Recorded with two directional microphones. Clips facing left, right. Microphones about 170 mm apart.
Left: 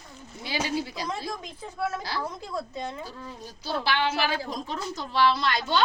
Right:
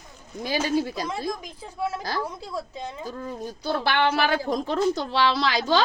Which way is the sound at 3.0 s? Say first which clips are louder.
Right 8 dB; 50° right (ahead or behind).